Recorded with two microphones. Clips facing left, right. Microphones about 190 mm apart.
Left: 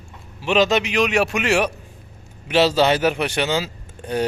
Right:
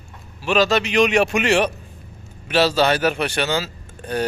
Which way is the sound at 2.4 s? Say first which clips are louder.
Left 1 dB; 20° left (ahead or behind).